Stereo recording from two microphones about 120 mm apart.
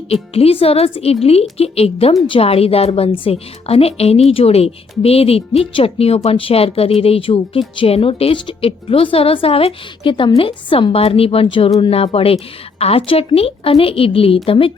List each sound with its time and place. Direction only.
0.1 s a woman's voice: 55° left (ahead or behind)